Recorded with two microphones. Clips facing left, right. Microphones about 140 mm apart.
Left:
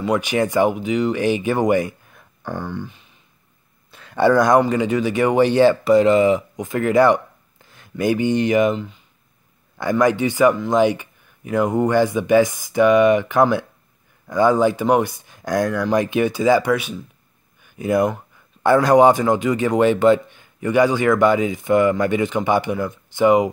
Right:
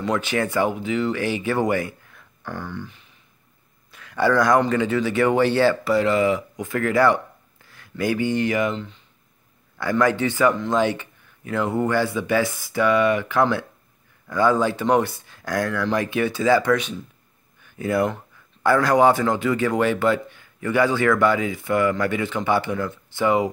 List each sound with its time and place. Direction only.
0.0 s speech: 15° left (ahead or behind)
3.9 s a sound: 30° left (ahead or behind)
4.3 s speech: 20° left (ahead or behind)